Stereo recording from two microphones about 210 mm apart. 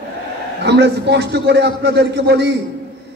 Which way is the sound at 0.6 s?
55° right (ahead or behind).